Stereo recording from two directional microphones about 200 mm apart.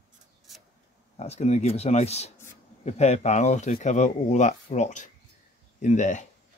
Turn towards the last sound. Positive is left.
turn(degrees=35)  # may be behind; listen again after turning